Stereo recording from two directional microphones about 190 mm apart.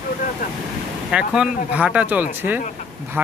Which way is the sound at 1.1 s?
5° right (ahead or behind).